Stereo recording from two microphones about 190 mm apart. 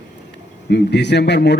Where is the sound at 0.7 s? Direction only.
65° left (ahead or behind).